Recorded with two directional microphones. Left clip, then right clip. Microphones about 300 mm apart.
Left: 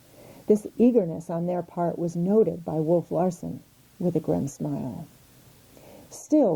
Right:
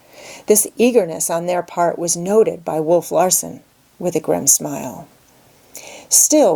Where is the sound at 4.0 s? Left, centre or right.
Right.